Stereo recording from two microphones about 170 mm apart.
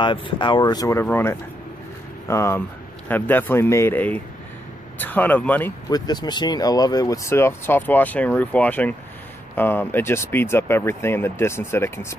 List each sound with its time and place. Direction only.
0.0 s speech: 30° left (ahead or behind); by 5.7 s 10° left (ahead or behind)
5.9 s speech: 25° left (ahead or behind)